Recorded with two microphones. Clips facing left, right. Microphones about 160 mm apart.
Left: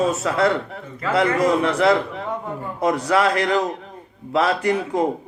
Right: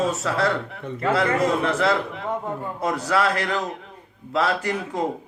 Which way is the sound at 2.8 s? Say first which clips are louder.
Left 4 dB; 25° left (ahead or behind).